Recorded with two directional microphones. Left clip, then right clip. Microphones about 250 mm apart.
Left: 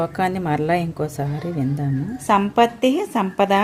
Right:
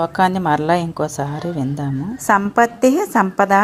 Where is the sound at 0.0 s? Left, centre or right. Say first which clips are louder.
Right 5 dB; centre.